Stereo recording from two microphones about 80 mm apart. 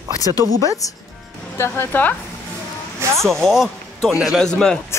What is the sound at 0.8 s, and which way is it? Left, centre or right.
Speech, left.